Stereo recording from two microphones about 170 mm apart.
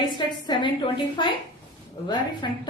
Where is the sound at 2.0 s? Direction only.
25° left (ahead or behind).